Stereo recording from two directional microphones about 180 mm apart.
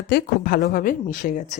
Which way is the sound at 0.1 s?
55° left (ahead or behind).